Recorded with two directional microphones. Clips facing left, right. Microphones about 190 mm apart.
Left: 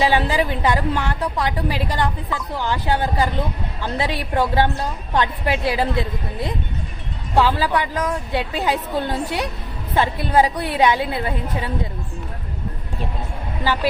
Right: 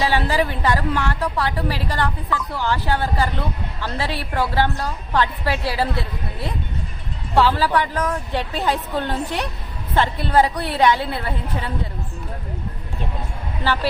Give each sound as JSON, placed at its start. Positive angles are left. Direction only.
{"t": 0.0, "sound": "a woman's voice", "side_deg": 15}